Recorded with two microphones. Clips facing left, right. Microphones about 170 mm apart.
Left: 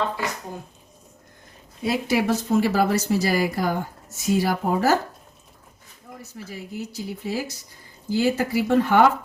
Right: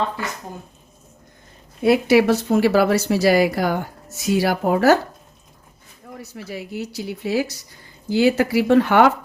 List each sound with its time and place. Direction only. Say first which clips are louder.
1.8 s speech: right 8 dB; 70° right (ahead or behind)
6.1 s speech: right 5 dB; 75° right (ahead or behind)